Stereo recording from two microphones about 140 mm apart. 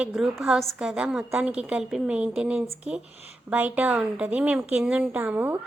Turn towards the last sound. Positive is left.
turn(degrees=-10)  # may be behind; listen again after turning